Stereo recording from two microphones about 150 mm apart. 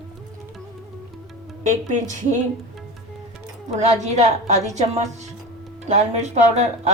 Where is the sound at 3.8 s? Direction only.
50° right (ahead or behind).